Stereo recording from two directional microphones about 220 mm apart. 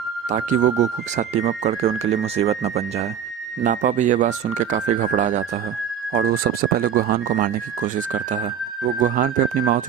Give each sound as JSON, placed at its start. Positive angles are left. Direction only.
{"t": 0.3, "sound": "speech", "side_deg": -35}